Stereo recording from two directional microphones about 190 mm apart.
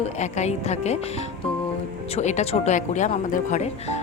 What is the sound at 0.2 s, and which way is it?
Speech, 35° left (ahead or behind).